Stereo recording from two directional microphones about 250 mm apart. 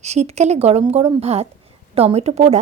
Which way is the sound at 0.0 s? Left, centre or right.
Right.